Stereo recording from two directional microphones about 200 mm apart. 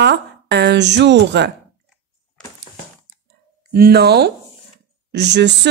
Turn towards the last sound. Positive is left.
turn(degrees=-60)  # may be behind; listen again after turning